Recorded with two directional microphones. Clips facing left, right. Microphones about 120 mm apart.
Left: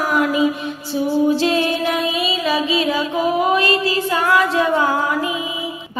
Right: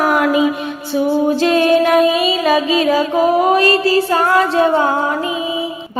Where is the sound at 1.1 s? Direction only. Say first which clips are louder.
Right 2 dB; 55° right (ahead or behind); by 4.9 s 30° right (ahead or behind).